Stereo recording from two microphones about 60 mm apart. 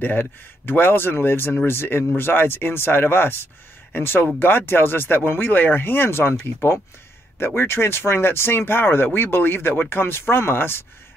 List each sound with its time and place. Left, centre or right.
0.0 s speech: left